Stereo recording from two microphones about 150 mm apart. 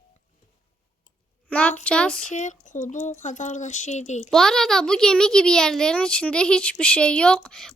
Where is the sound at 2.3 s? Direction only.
55° left (ahead or behind).